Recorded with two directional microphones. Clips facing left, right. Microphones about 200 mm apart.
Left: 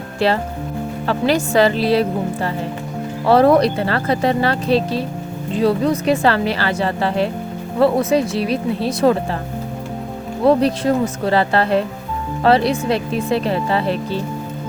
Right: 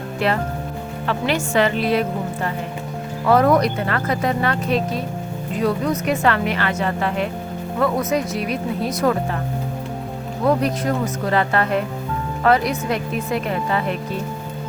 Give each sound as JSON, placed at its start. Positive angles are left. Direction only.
{"t": 0.2, "sound": "speech", "side_deg": 30}
{"t": 10.4, "sound": "speech", "side_deg": 30}